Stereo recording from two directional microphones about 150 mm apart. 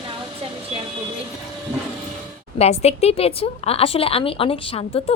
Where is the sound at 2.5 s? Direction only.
45° left (ahead or behind).